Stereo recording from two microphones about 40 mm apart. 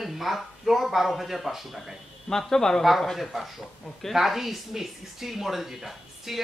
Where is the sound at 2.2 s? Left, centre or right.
Centre.